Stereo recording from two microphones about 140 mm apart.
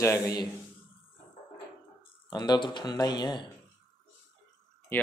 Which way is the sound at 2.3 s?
30° left (ahead or behind).